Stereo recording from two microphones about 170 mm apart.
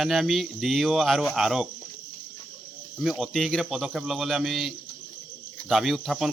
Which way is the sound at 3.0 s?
Centre (ahead or behind).